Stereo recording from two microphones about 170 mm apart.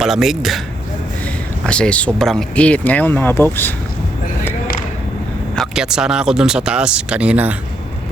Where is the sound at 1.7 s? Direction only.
5° left (ahead or behind).